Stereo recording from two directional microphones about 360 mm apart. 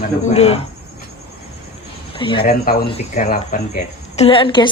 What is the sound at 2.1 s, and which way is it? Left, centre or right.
Speech, centre.